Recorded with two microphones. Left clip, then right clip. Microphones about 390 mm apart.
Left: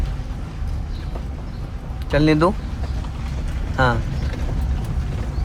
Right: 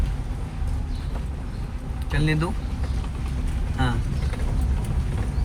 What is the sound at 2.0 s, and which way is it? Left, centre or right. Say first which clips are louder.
Speech: left 10 dB; centre.